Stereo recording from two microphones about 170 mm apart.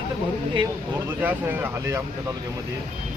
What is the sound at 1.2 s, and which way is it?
Speech, 10° right (ahead or behind).